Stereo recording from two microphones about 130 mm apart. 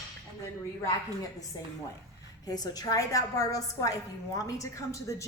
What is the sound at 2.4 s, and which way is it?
A woman's voice, 30° left (ahead or behind).